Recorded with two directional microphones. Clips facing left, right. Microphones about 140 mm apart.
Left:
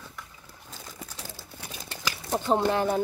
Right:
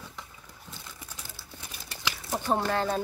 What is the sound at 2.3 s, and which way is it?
Speech, 20° left (ahead or behind).